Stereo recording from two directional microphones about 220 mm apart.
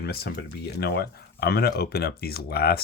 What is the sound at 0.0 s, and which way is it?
Speech, 45° left (ahead or behind).